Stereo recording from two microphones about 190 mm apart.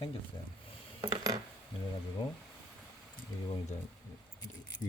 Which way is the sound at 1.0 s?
15° right (ahead or behind).